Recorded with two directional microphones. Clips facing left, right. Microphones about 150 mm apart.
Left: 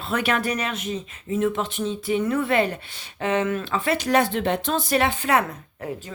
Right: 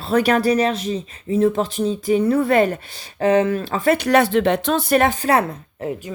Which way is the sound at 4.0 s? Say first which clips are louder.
Right 4 dB; 70° right (ahead or behind).